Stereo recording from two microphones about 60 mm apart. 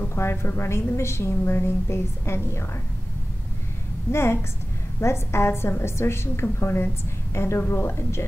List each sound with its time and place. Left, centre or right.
0.1 s a woman's voice: left
4.1 s a woman's voice: left